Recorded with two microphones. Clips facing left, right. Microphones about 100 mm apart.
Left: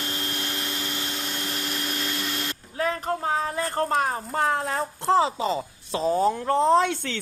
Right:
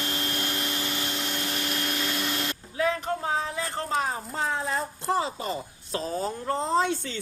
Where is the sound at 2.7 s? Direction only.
40° left (ahead or behind).